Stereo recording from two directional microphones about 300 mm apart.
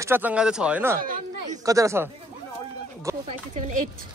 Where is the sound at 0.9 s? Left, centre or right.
Right.